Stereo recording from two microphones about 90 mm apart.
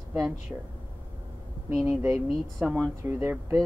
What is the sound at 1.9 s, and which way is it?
Speech, 20° right (ahead or behind).